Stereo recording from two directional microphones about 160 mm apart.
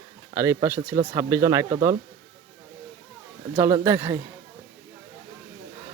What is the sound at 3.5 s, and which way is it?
Speech, 15° right (ahead or behind).